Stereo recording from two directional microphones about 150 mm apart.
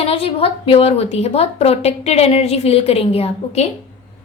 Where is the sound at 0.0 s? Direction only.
40° left (ahead or behind).